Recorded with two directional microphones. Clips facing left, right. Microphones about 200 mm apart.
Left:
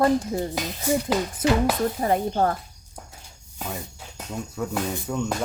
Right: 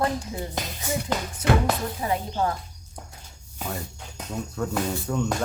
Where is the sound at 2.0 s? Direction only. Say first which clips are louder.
Left 4 dB; 50° left (ahead or behind).